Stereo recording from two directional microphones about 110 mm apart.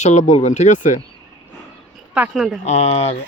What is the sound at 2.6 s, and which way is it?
Speech, 90° left.